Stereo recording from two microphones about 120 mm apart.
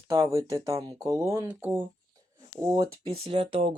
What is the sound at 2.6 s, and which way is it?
Speech, 25° right (ahead or behind).